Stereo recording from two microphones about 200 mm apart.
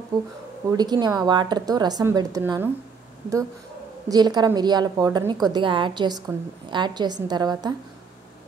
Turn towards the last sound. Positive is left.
turn(degrees=-20)  # may be behind; listen again after turning